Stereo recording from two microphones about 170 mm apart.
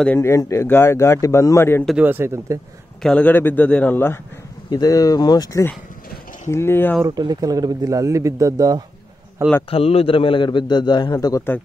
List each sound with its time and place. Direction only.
0.0 s a man's voice: 15° left (ahead or behind)
1.9 s speech: 10° right (ahead or behind)
3.0 s a man's voice: 5° left (ahead or behind)
4.6 s a man's voice: 20° left (ahead or behind)
7.1 s speech: 25° right (ahead or behind)
9.7 s a man's voice: 35° left (ahead or behind)